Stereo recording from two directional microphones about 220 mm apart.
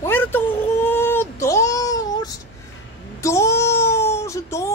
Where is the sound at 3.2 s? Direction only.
15° left (ahead or behind).